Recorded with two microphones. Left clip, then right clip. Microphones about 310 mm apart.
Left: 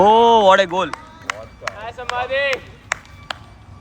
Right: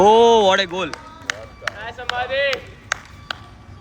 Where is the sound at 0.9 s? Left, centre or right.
Centre.